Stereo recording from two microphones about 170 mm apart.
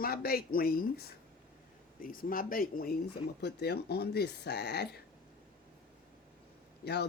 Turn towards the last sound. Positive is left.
turn(degrees=75)  # may be behind; listen again after turning